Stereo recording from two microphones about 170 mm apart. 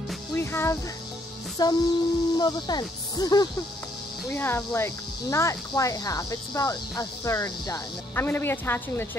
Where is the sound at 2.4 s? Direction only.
25° left (ahead or behind).